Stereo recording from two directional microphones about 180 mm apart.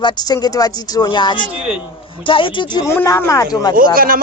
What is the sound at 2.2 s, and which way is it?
Speech, 30° left (ahead or behind).